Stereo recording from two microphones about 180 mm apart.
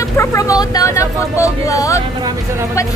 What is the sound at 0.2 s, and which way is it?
Speech, 15° left (ahead or behind).